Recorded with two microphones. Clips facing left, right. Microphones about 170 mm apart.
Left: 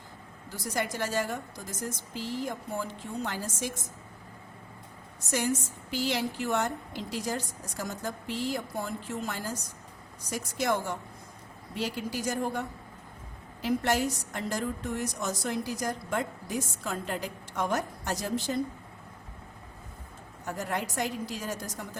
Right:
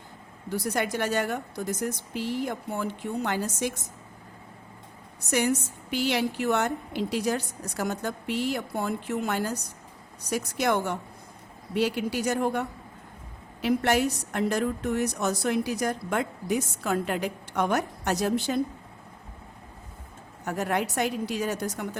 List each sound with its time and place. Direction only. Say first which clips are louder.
0.5 s a woman's voice: right 5 dB; 65° right (ahead or behind)
5.3 s a woman's voice: right 4 dB; 65° right (ahead or behind)
20.4 s a woman's voice: right 5 dB; 65° right (ahead or behind)